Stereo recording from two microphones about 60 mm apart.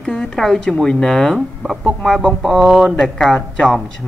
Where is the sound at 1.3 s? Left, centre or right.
Centre.